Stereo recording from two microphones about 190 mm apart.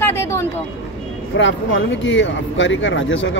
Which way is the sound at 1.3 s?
75° left (ahead or behind).